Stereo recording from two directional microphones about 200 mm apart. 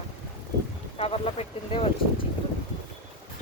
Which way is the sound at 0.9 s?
30° left (ahead or behind).